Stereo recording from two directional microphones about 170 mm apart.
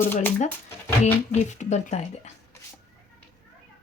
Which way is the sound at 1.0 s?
40° left (ahead or behind).